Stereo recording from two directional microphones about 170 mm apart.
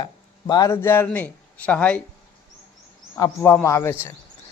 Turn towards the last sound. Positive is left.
turn(degrees=15)  # may be behind; listen again after turning